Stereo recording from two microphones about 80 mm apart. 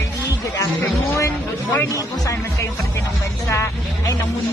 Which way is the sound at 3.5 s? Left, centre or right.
Left.